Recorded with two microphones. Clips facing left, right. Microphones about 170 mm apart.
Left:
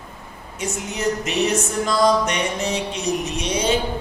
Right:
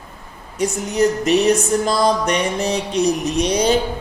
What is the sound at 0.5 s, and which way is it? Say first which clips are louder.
Music: right 8 dB; 35° right (ahead or behind).